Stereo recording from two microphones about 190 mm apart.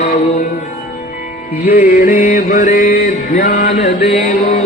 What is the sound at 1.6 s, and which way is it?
Music, 45° left (ahead or behind).